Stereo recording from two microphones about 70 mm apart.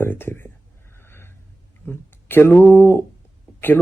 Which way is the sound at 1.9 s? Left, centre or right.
Left.